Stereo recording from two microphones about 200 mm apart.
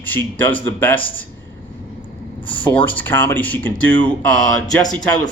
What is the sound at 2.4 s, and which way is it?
Speech, 25° left (ahead or behind).